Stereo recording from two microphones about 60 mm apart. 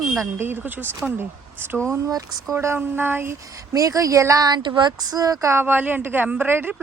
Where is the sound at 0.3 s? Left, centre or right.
Right.